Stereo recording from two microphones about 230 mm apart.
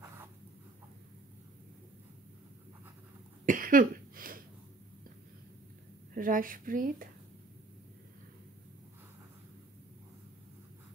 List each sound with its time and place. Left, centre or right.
3.4 s cough: right
6.1 s speech: right